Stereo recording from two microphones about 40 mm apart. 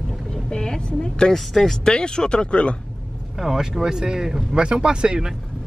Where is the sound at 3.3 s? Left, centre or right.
Centre.